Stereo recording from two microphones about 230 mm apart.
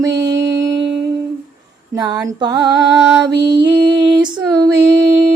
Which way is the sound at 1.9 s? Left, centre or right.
Centre.